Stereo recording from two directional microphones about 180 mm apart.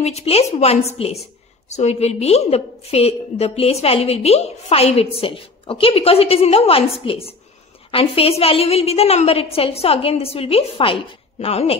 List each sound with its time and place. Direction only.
0.0 s a woman's voice: 35° left (ahead or behind)